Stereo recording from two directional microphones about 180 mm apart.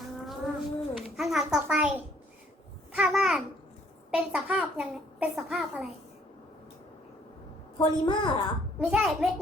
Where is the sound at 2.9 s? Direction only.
Centre (ahead or behind).